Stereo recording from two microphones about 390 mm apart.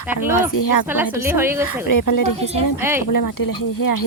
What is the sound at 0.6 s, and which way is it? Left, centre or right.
Speech, left.